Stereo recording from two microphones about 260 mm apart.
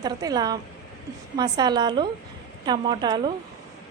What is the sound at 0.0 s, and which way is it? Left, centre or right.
A woman's voice, centre.